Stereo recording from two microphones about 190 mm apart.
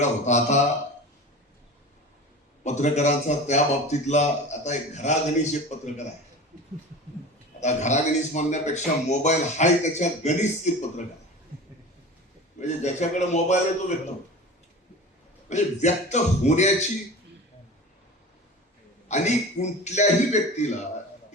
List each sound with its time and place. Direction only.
0.0 s a man's voice: 35° left (ahead or behind)
2.6 s a man's voice: 40° left (ahead or behind)
7.6 s a man's voice: 40° left (ahead or behind)
12.5 s a man's voice: 40° left (ahead or behind)
15.4 s a man's voice: 35° left (ahead or behind)
19.0 s a man's voice: 35° left (ahead or behind)